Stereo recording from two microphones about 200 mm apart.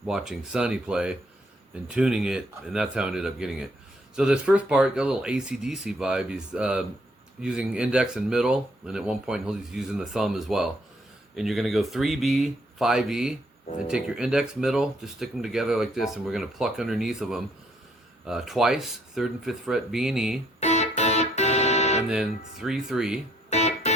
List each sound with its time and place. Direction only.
0.0 s speech: centre (ahead or behind)
20.6 s music: 35° left (ahead or behind)
22.1 s speech: centre (ahead or behind)
23.5 s music: 35° left (ahead or behind)